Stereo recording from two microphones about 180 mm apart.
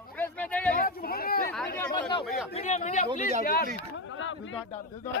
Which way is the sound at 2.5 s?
35° left (ahead or behind).